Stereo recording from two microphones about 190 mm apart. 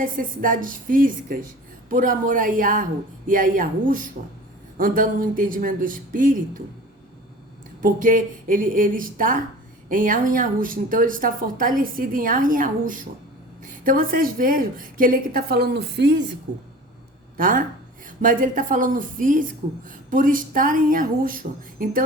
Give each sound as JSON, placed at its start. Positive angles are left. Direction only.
{"t": 0.0, "sound": "a woman's voice", "side_deg": -45}
{"t": 7.8, "sound": "a woman's voice", "side_deg": -45}
{"t": 17.3, "sound": "a woman's voice", "side_deg": -45}